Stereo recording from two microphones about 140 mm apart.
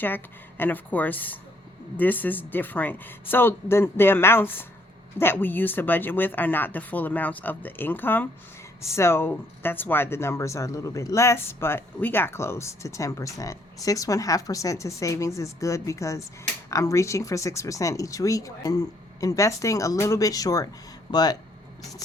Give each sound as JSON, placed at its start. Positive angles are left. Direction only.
{"t": 0.0, "sound": "speech", "side_deg": 15}